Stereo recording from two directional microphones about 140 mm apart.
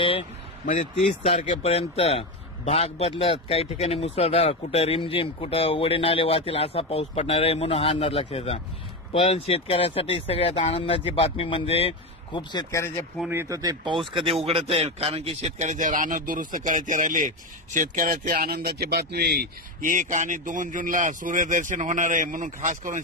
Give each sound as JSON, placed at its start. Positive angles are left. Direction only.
{"t": 1.4, "sound": "a man's voice", "side_deg": 45}
{"t": 12.7, "sound": "speech", "side_deg": 20}
{"t": 13.3, "sound": "speech", "side_deg": -20}
{"t": 14.1, "sound": "a man's voice", "side_deg": -45}
{"t": 17.7, "sound": "speech", "side_deg": -80}
{"t": 19.8, "sound": "a man's voice", "side_deg": -65}